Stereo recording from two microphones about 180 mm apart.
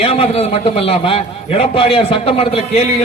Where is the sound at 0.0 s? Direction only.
35° left (ahead or behind).